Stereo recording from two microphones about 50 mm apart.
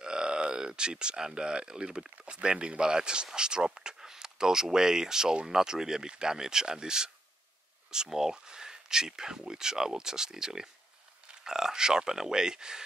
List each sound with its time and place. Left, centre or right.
0.0 s speech: centre